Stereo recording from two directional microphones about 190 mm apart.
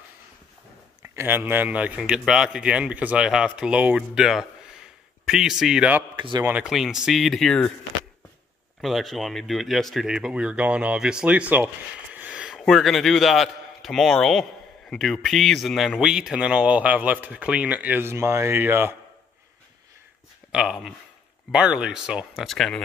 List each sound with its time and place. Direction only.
1.0 s speech: 10° right (ahead or behind)
6.1 s speech: 25° right (ahead or behind)
6.4 s speech: 5° right (ahead or behind)
8.8 s speech: centre (ahead or behind)
20.5 s speech: centre (ahead or behind)